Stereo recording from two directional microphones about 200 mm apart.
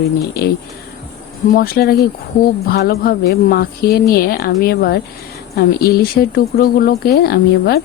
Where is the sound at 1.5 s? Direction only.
45° left (ahead or behind).